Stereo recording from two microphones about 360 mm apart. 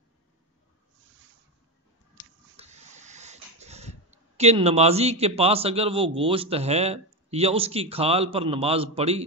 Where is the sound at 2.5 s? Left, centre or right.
Centre.